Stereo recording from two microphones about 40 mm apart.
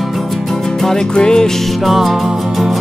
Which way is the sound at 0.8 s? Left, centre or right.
Centre.